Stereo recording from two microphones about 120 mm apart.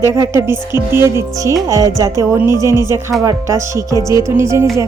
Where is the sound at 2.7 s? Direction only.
35° left (ahead or behind).